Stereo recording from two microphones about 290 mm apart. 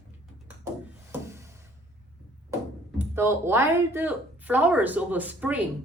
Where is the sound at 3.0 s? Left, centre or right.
Centre.